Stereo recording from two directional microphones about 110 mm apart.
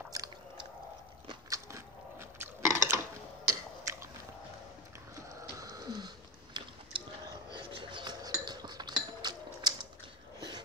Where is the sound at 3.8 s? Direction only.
25° right (ahead or behind).